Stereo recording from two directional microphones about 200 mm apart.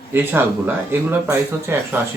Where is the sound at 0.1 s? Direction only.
10° right (ahead or behind).